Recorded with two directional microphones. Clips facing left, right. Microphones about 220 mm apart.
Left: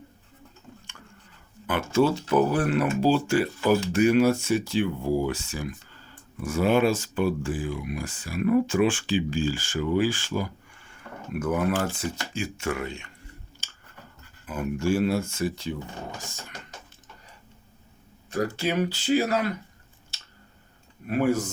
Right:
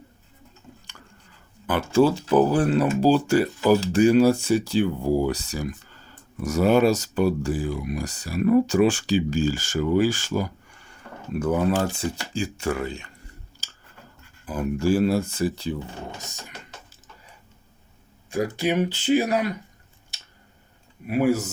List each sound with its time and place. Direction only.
1.6 s speech: 35° right (ahead or behind)
11.3 s speech: 30° right (ahead or behind)
13.6 s scissors: 35° right (ahead or behind)
14.4 s speech: 35° right (ahead or behind)
18.3 s speech: 15° right (ahead or behind)
21.1 s speech: 10° right (ahead or behind)